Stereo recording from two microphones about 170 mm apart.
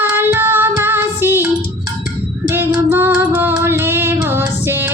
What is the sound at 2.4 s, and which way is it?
Child singing, 10° right (ahead or behind).